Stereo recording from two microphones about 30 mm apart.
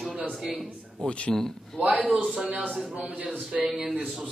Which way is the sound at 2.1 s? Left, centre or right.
Centre.